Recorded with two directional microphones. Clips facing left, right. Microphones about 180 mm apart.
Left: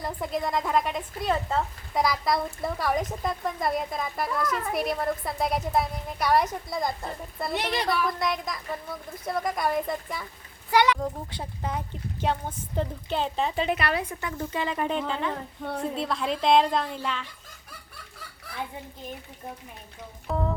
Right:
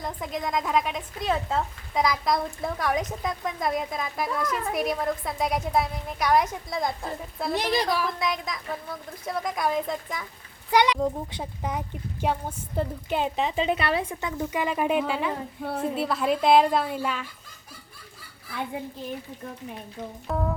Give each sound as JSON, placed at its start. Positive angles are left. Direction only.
{"t": 0.0, "sound": "a woman's voice", "side_deg": 5}
{"t": 7.5, "sound": "a woman's voice", "side_deg": -35}
{"t": 7.9, "sound": "a woman's voice", "side_deg": 0}
{"t": 10.7, "sound": "a woman's voice", "side_deg": -15}
{"t": 13.6, "sound": "a woman's voice", "side_deg": -25}
{"t": 20.2, "sound": "a woman's voice", "side_deg": 0}